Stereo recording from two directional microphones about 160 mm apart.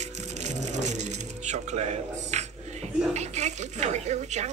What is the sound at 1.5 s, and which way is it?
A man's voice, 45° right (ahead or behind).